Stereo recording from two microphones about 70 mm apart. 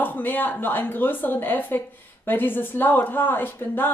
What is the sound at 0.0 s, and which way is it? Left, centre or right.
A woman's voice, left.